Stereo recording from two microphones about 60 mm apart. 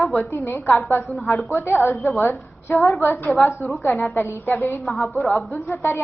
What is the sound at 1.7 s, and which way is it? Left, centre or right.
A woman's voice, left.